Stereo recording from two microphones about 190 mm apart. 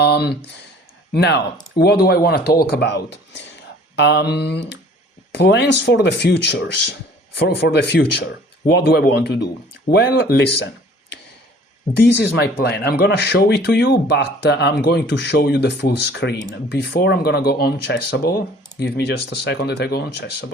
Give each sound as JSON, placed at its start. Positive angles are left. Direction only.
{"t": 0.0, "sound": "speech", "side_deg": 60}
{"t": 11.9, "sound": "speech", "side_deg": 60}